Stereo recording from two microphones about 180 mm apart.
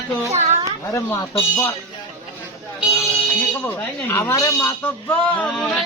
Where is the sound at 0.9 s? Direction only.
15° left (ahead or behind).